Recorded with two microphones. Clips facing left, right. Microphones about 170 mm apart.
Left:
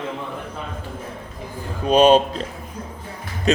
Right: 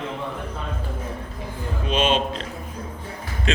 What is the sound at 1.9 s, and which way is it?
Speech, 40° left (ahead or behind).